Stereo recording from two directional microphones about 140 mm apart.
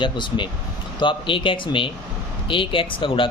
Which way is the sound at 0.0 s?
35° left (ahead or behind).